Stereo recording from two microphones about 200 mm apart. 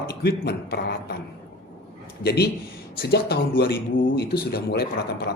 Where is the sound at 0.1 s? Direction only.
50° left (ahead or behind).